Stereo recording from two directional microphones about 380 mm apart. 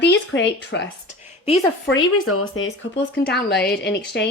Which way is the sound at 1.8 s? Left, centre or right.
Left.